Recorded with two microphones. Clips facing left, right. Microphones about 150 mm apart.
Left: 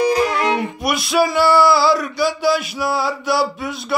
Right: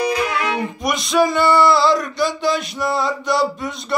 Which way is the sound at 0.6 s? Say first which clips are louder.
Left 1 dB; 5° left (ahead or behind).